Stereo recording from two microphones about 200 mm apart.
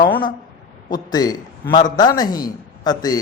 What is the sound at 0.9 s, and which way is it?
A man's voice, 20° left (ahead or behind).